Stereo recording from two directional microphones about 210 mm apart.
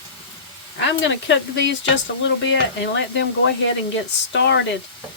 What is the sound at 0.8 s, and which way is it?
Speech, 60° left (ahead or behind).